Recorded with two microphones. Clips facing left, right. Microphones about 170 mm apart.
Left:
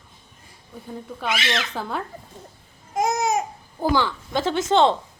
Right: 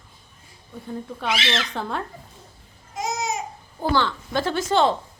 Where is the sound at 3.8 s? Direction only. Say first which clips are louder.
Left 1 dB; 10° left (ahead or behind).